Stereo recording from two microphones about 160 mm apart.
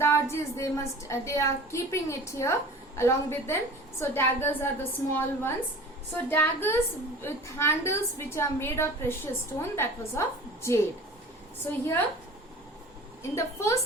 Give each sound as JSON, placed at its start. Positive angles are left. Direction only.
{"t": 0.0, "sound": "a woman's voice", "side_deg": 15}
{"t": 13.3, "sound": "a woman's voice", "side_deg": 15}